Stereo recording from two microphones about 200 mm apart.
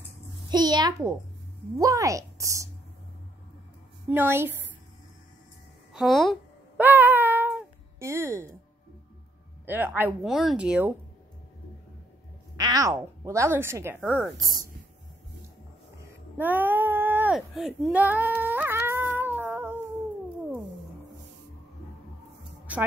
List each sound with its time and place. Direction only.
0.5 s a child's voice: 20° right (ahead or behind)
4.1 s speech: 10° right (ahead or behind)
5.9 s a child's voice: centre (ahead or behind)
6.8 s cat: 10° right (ahead or behind)
9.7 s speech: 10° right (ahead or behind)
12.5 s a woman's voice: 20° right (ahead or behind)
16.0 s a sound: 10° right (ahead or behind)